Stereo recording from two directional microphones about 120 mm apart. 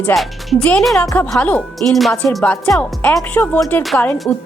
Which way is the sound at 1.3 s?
10° left (ahead or behind).